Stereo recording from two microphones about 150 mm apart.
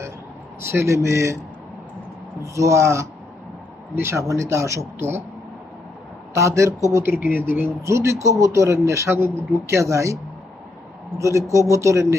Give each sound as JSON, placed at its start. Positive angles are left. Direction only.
{"t": 0.6, "sound": "speech", "side_deg": -15}
{"t": 2.6, "sound": "speech", "side_deg": -20}
{"t": 6.3, "sound": "speech", "side_deg": -20}
{"t": 11.2, "sound": "speech", "side_deg": -20}